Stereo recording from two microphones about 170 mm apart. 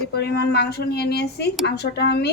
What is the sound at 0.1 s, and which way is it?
Speech, 70° left (ahead or behind).